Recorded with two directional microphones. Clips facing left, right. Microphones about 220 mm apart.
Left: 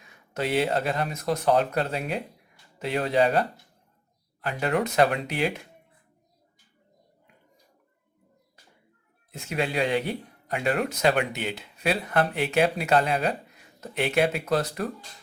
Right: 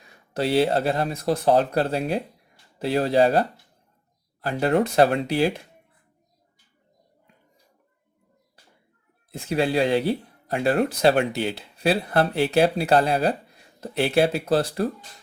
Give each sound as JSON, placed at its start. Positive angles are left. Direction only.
{"t": 0.0, "sound": "speech", "side_deg": -35}
{"t": 9.3, "sound": "speech", "side_deg": -35}